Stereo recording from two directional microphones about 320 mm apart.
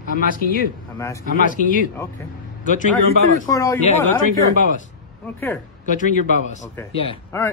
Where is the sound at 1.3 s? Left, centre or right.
Left.